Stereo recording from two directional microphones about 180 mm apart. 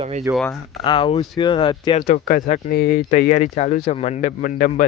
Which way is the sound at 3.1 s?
45° left (ahead or behind).